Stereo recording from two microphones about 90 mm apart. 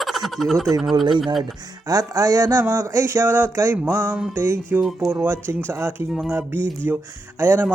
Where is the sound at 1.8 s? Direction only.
40° right (ahead or behind).